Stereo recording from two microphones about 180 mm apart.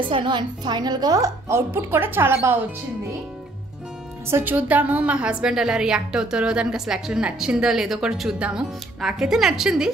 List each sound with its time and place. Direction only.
0.1 s a woman's voice: 25° right (ahead or behind)
4.3 s a woman's voice: 10° right (ahead or behind)